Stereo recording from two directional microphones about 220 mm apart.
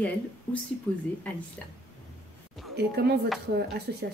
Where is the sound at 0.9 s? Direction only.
5° left (ahead or behind).